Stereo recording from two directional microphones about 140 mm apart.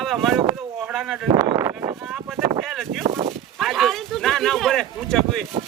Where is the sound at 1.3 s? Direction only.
25° right (ahead or behind).